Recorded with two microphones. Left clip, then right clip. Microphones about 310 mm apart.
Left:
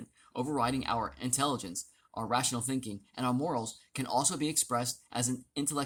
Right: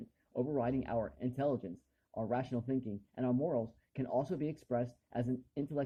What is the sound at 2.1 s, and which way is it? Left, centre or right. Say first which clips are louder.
Speech: left 5 dB; left.